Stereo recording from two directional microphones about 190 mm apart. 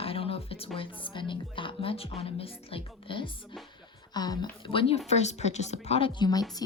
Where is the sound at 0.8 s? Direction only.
25° left (ahead or behind).